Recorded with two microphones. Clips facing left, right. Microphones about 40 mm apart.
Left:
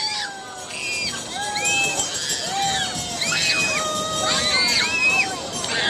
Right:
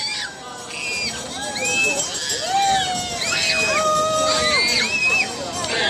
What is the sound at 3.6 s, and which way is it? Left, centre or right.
Music, right.